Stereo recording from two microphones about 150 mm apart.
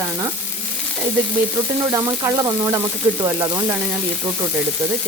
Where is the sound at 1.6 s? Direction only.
20° right (ahead or behind).